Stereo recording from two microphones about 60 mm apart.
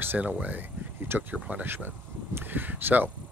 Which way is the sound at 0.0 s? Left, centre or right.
Right.